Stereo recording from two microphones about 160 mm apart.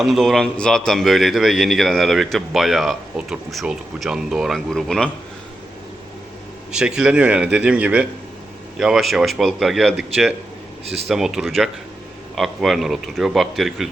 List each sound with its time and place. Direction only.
0.0 s a man's voice: centre (ahead or behind)
6.7 s a man's voice: 5° right (ahead or behind)
10.8 s speech: 40° right (ahead or behind)
11.1 s a man's voice: 5° right (ahead or behind)